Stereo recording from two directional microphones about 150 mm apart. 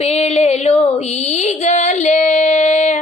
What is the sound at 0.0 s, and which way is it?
Female singing, 45° left (ahead or behind).